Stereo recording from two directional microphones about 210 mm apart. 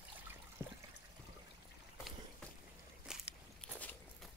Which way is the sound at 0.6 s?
15° right (ahead or behind).